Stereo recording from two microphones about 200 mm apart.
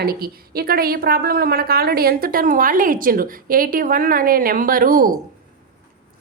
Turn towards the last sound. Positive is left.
turn(degrees=-45)  # may be behind; listen again after turning